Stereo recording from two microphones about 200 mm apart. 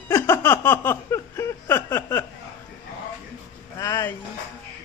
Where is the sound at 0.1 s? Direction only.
10° left (ahead or behind).